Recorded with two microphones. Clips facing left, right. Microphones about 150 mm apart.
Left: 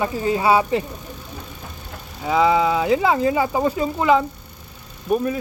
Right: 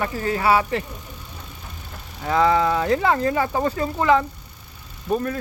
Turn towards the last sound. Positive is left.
turn(degrees=15)  # may be behind; listen again after turning